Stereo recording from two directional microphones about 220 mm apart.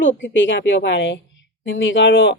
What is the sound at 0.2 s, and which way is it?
A woman's voice, 55° left (ahead or behind).